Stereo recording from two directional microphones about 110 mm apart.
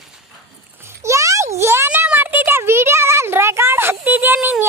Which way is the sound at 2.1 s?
20° right (ahead or behind).